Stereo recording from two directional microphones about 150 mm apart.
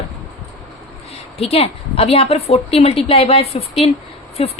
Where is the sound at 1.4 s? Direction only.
40° left (ahead or behind).